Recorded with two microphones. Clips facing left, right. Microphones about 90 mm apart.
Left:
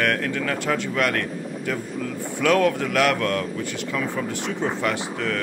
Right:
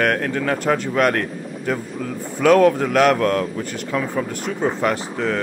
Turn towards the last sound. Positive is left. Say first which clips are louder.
# right 4 dB
turn(degrees=-40)  # may be behind; listen again after turning